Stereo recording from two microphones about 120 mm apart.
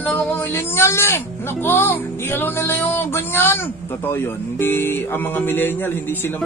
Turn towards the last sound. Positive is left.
turn(degrees=20)  # may be behind; listen again after turning